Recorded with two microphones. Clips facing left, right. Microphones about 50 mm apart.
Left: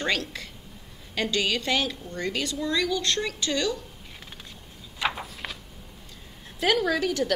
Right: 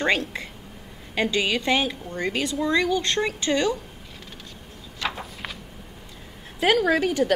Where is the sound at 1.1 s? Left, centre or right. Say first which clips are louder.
Right 3 dB; centre.